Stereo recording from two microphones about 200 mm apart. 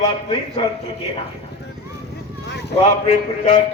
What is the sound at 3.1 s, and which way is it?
Speech, 30° left (ahead or behind).